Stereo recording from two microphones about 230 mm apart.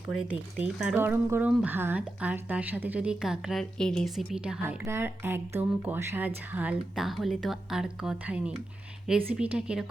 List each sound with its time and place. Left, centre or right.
0.1 s speech: left
0.6 s speech: centre